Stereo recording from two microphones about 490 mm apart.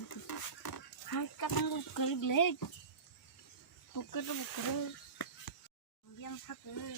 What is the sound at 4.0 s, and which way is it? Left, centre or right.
Speech, left.